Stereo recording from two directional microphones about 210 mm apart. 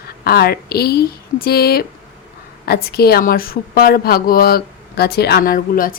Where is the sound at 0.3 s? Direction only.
50° left (ahead or behind).